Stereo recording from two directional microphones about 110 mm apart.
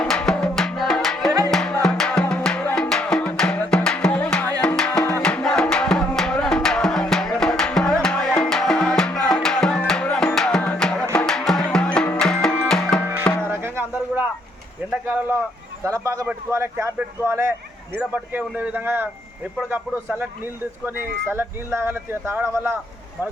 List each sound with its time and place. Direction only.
0.0 s music: 10° left (ahead or behind)
13.4 s music: 20° right (ahead or behind)
15.0 s a sound: 20° right (ahead or behind)
18.1 s speech: 15° right (ahead or behind)
20.8 s speech: 20° right (ahead or behind)